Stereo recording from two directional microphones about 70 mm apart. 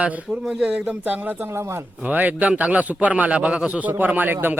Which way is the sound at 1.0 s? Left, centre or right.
Right.